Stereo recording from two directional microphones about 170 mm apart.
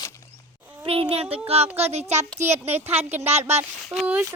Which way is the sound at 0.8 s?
35° right (ahead or behind).